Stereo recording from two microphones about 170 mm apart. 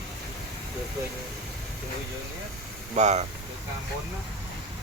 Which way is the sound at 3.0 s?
40° right (ahead or behind).